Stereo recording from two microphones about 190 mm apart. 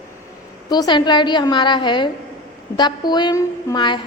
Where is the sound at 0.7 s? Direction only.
20° left (ahead or behind).